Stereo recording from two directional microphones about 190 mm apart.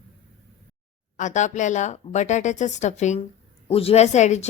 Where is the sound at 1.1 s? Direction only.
40° left (ahead or behind).